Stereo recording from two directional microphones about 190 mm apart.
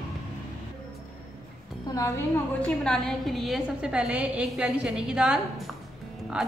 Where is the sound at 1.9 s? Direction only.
20° left (ahead or behind).